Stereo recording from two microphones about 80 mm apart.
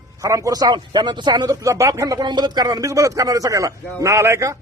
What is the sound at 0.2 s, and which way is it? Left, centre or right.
A man's voice, right.